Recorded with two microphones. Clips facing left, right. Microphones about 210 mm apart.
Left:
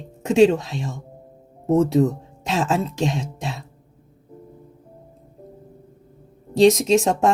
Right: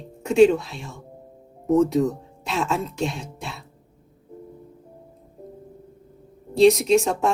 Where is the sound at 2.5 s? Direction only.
90° left.